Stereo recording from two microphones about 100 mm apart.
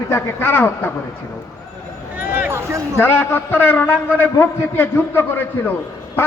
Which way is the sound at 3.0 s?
20° left (ahead or behind).